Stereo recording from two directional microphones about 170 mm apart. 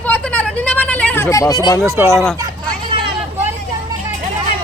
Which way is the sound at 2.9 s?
30° right (ahead or behind).